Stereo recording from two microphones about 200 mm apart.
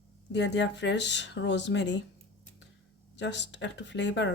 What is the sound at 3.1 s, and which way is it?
A woman's voice, 60° left (ahead or behind).